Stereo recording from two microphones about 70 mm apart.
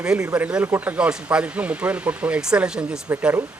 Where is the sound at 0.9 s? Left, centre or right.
Centre.